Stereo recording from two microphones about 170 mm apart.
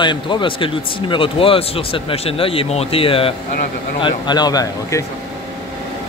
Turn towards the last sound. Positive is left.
turn(degrees=20)  # may be behind; listen again after turning